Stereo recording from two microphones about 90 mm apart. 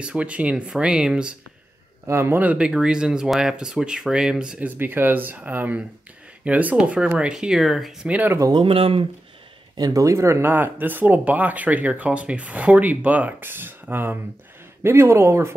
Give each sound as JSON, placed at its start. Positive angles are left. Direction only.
{"t": 0.0, "sound": "speech", "side_deg": -10}
{"t": 2.0, "sound": "speech", "side_deg": -25}
{"t": 8.1, "sound": "speech", "side_deg": -20}
{"t": 8.5, "sound": "speech", "side_deg": -90}
{"t": 9.8, "sound": "speech", "side_deg": -40}